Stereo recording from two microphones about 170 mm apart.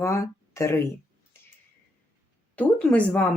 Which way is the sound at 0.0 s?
15° left (ahead or behind).